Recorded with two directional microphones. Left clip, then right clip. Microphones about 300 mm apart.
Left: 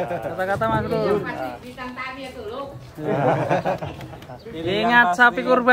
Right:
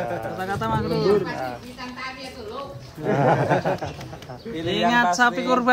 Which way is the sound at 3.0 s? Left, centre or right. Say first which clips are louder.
Right 1 dB; right.